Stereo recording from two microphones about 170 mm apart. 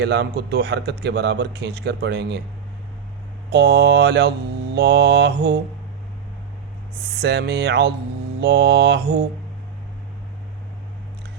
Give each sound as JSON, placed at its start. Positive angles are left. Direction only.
{"t": 0.0, "sound": "speech", "side_deg": -75}
{"t": 3.5, "sound": "speech", "side_deg": -75}
{"t": 7.2, "sound": "speech", "side_deg": -90}